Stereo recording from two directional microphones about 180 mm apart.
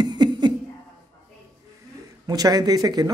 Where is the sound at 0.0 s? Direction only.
25° right (ahead or behind).